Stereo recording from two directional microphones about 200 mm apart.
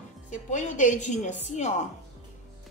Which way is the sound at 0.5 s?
40° left (ahead or behind).